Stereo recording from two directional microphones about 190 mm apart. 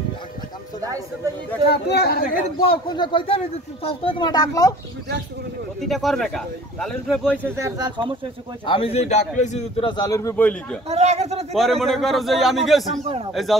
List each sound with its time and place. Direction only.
0.8 s speech: 15° right (ahead or behind)
1.7 s speech: 55° left (ahead or behind)
2.6 s speech: 25° left (ahead or behind)
5.8 s speech: centre (ahead or behind)
7.4 s speech: 15° right (ahead or behind)
8.6 s a man's voice: 30° left (ahead or behind)
9.8 s a man's voice: 20° left (ahead or behind)
10.9 s speech: 35° right (ahead or behind)
11.5 s speech: centre (ahead or behind)
12.9 s speech: 30° right (ahead or behind)
13.3 s speech: centre (ahead or behind)